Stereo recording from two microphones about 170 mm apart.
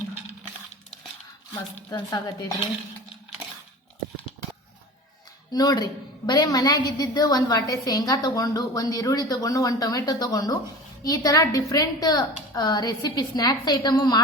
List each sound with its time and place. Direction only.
1.9 s a woman's voice: 25° left (ahead or behind)
5.5 s a woman's voice: 20° left (ahead or behind)